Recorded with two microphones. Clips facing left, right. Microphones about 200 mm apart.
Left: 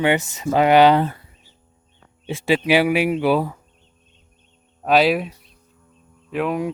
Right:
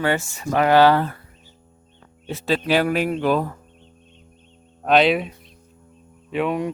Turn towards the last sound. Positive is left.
turn(degrees=0)  # may be behind; listen again after turning